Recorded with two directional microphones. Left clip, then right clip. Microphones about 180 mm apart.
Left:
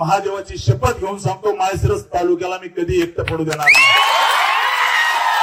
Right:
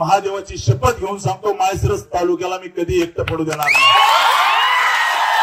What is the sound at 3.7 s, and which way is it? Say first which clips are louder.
Speech: left 4 dB; 30° left (ahead or behind).